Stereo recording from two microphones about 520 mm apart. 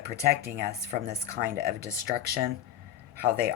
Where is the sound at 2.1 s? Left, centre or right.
Centre.